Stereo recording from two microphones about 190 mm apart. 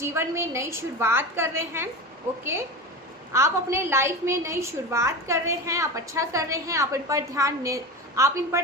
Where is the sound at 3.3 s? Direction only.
15° right (ahead or behind).